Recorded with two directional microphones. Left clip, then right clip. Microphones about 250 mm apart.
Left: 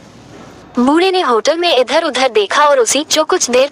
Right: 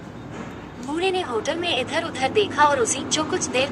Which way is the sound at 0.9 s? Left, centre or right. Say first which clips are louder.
Left 10 dB; left.